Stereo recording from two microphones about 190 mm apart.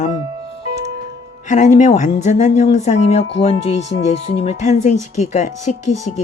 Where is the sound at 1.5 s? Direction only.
40° left (ahead or behind).